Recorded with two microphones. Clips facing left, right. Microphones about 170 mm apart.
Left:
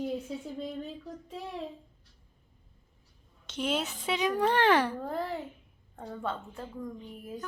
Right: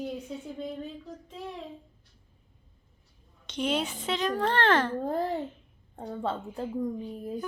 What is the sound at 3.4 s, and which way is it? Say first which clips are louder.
A woman's voice: right 2 dB; 5° left (ahead or behind).